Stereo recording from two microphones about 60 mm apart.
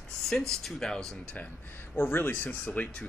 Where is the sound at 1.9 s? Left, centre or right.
Left.